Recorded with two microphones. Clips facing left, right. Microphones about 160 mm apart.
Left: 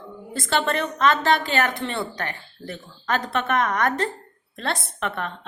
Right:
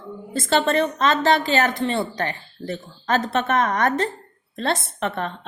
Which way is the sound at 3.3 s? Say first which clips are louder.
Left 1 dB; 25° right (ahead or behind).